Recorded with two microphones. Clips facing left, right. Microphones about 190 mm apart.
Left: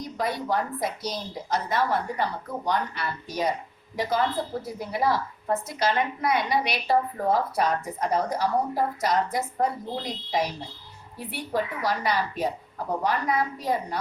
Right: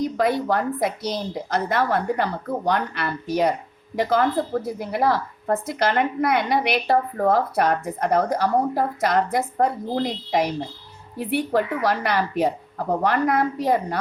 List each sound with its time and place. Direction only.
0.2 s a woman's voice: 60° right (ahead or behind)